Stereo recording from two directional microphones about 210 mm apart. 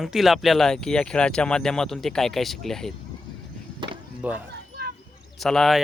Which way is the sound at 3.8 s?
20° right (ahead or behind).